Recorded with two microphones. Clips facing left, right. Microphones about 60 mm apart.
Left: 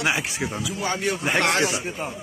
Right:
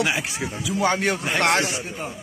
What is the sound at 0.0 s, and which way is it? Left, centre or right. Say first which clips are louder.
Speech: even; centre.